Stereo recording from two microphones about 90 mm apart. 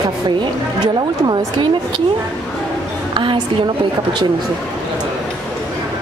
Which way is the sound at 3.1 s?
60° right (ahead or behind).